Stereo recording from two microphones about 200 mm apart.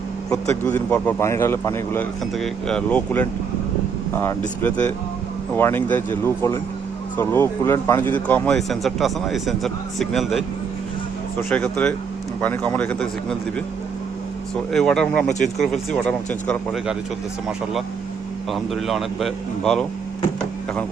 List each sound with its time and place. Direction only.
0.3 s a man's voice: 10° left (ahead or behind)
14.5 s speech: 5° left (ahead or behind)
18.5 s speech: centre (ahead or behind)